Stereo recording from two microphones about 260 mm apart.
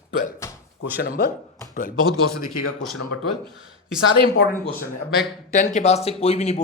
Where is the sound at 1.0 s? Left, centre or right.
Left.